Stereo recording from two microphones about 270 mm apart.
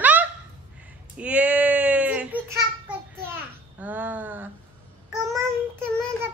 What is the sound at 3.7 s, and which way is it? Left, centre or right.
Speech, centre.